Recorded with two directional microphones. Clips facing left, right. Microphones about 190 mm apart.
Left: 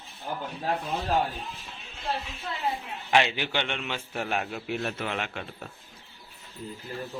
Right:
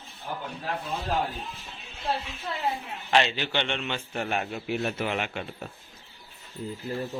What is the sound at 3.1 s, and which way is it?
A man's voice, 10° left (ahead or behind).